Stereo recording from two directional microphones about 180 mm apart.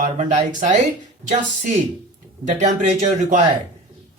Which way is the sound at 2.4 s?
40° right (ahead or behind).